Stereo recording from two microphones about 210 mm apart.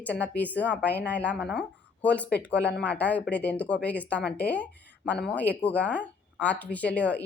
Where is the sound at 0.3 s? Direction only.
5° left (ahead or behind).